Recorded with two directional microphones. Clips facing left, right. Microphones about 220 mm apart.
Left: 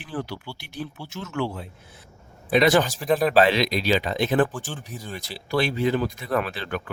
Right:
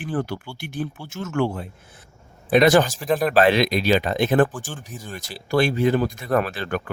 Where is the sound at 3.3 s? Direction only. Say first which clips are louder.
Right 2 dB; 50° right (ahead or behind).